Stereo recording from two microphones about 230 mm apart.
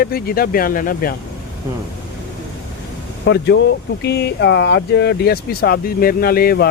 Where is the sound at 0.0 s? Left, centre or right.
Left.